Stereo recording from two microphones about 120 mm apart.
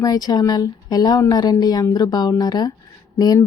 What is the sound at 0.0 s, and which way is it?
Speech, 35° left (ahead or behind).